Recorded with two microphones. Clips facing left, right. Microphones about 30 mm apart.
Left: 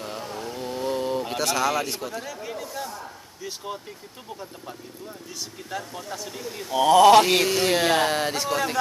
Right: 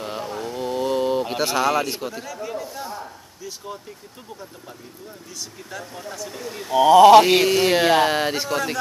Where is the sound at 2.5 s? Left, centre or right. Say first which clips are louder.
Right 3 dB; centre.